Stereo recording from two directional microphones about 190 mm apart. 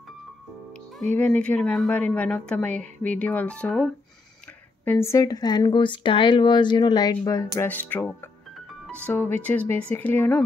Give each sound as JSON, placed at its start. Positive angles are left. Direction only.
{"t": 1.1, "sound": "speech", "side_deg": 5}